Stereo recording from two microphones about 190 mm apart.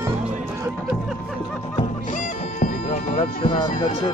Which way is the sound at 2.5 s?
40° left (ahead or behind).